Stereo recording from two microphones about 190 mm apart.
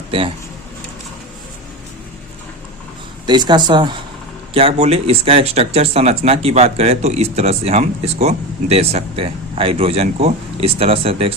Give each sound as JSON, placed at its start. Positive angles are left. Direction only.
{"t": 3.2, "sound": "speech", "side_deg": -25}